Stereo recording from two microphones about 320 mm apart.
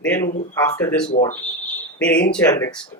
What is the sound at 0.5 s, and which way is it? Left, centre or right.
Speech, centre.